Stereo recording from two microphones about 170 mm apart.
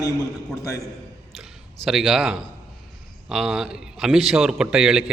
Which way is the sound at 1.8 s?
Centre (ahead or behind).